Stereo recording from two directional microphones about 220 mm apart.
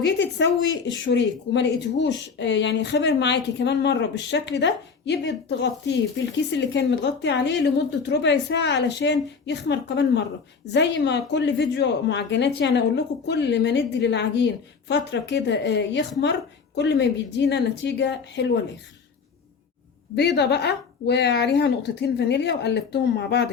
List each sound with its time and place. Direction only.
0.2 s speech: 55° left (ahead or behind)
20.1 s speech: 50° left (ahead or behind)